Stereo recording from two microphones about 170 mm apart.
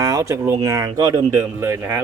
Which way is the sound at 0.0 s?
20° right (ahead or behind).